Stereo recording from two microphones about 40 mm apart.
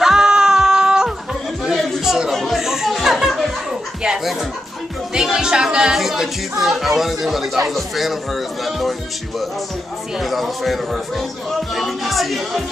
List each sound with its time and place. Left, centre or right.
0.0 s music: centre
2.0 s chatter: centre
2.3 s a sound: centre
2.6 s music: centre
5.2 s speech: centre
5.9 s speech: centre
10.2 s speech: centre
11.7 s music: centre